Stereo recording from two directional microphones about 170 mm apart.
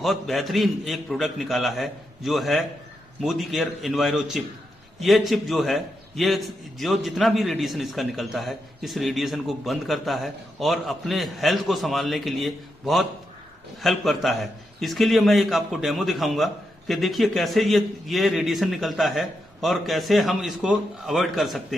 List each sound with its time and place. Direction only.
0.0 s a man's voice: centre (ahead or behind)